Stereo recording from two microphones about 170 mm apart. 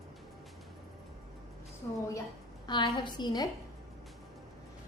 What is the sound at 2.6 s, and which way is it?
Speech, 25° left (ahead or behind).